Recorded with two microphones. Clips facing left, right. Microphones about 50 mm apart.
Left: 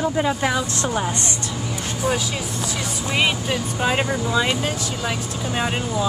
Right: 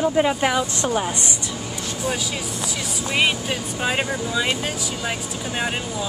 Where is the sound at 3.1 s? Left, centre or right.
Centre.